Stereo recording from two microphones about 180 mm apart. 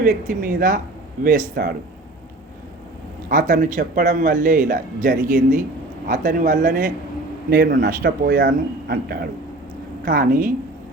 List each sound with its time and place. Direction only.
0.0 s a man's voice: 50° right (ahead or behind)
3.2 s a man's voice: 50° right (ahead or behind)